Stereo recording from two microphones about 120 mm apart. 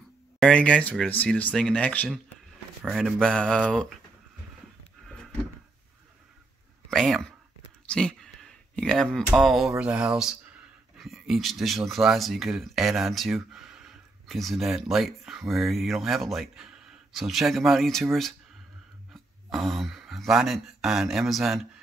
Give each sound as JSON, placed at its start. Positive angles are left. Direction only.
{"t": 0.4, "sound": "speech", "side_deg": 10}
{"t": 5.0, "sound": "a sound", "side_deg": 5}
{"t": 6.9, "sound": "speech", "side_deg": 5}
{"t": 7.9, "sound": "a sound", "side_deg": 5}
{"t": 9.3, "sound": "speech", "side_deg": -5}
{"t": 19.5, "sound": "speech", "side_deg": 0}